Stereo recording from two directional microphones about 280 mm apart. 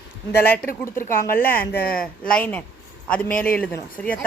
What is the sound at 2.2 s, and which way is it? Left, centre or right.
Speech, centre.